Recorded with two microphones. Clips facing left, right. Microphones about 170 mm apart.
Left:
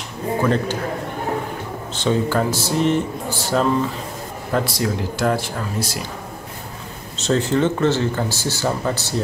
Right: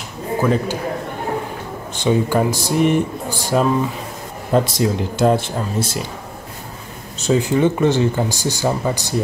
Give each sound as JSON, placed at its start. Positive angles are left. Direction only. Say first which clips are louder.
{"t": 0.4, "sound": "speech", "louder": "right 2 dB", "side_deg": -5}
{"t": 2.0, "sound": "speech", "louder": "right 2 dB", "side_deg": -15}
{"t": 7.2, "sound": "speech", "louder": "right 2 dB", "side_deg": -10}